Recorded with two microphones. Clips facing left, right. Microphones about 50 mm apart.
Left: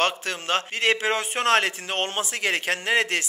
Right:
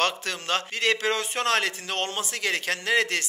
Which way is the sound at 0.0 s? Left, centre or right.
Centre.